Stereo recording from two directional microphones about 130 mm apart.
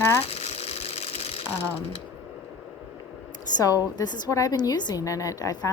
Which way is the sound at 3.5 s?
30° left (ahead or behind).